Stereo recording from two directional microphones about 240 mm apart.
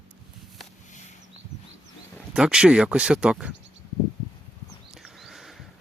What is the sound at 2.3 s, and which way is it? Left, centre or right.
Speech, centre.